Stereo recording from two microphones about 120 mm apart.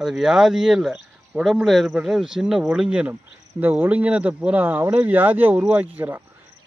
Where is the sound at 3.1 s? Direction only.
20° right (ahead or behind).